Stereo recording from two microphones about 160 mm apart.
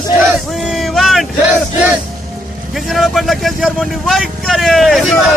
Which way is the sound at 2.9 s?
Centre (ahead or behind).